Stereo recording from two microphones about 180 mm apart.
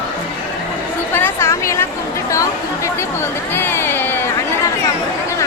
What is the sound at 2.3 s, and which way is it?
Chatter, 15° left (ahead or behind).